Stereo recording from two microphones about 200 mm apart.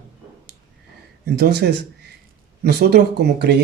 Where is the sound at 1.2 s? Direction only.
50° right (ahead or behind).